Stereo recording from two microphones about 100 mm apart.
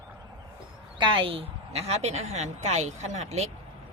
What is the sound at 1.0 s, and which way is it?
Speech, 65° right (ahead or behind).